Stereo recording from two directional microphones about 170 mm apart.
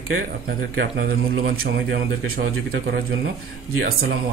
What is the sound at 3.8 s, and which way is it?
Speech, 65° right (ahead or behind).